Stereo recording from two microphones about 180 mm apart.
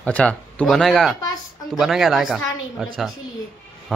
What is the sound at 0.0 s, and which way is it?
A woman's voice, 5° left (ahead or behind).